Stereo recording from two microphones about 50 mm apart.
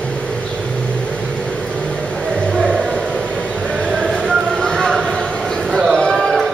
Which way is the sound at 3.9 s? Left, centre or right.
Right.